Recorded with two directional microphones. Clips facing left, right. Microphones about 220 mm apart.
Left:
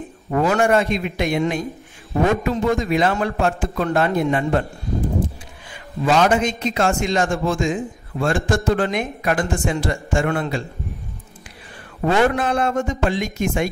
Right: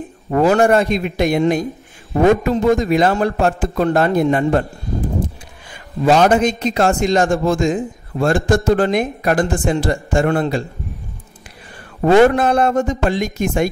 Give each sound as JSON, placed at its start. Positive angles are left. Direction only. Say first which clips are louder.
{"t": 0.3, "sound": "a man's voice", "louder": "right 4 dB", "side_deg": -35}
{"t": 6.0, "sound": "a man's voice", "louder": "right 4 dB", "side_deg": -40}
{"t": 12.0, "sound": "a man's voice", "louder": "right 7 dB", "side_deg": -40}